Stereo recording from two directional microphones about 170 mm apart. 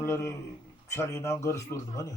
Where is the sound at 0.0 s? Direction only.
15° left (ahead or behind).